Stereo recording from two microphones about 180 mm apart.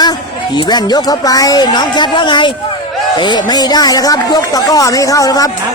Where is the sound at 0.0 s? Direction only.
25° left (ahead or behind).